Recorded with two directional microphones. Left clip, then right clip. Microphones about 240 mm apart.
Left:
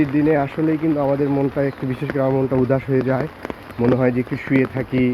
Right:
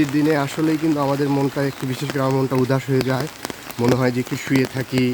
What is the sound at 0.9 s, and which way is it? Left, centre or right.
Speech, right.